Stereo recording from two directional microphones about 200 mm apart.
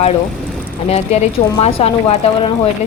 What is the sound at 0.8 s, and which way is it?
A woman's voice, 30° left (ahead or behind).